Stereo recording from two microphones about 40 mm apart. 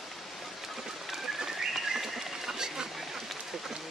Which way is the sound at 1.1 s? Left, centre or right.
Centre.